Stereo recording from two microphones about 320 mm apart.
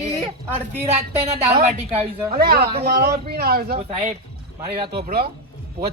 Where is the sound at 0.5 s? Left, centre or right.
Centre.